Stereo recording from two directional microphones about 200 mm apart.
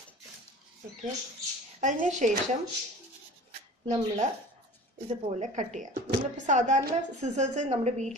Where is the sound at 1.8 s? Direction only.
40° right (ahead or behind).